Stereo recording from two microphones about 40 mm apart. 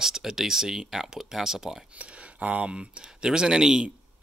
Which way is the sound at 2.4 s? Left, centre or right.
Right.